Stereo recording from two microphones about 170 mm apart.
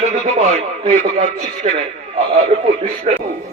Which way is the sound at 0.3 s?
35° right (ahead or behind).